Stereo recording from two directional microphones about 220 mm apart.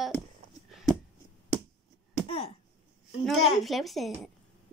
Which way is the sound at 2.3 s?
25° left (ahead or behind).